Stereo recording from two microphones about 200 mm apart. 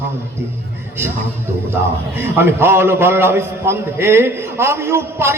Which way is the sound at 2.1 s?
10° right (ahead or behind).